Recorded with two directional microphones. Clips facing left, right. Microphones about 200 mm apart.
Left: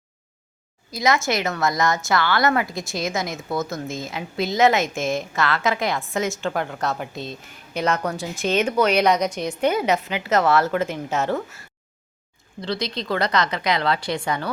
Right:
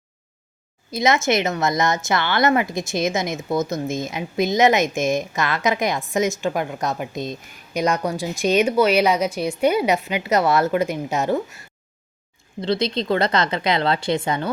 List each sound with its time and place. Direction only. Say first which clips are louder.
0.9 s a woman's voice: right 2 dB; 20° right (ahead or behind)
12.6 s a woman's voice: right 5 dB; 25° right (ahead or behind)